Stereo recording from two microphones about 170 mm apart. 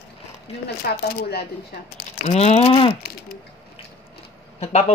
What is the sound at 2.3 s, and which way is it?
Speech, 40° left (ahead or behind).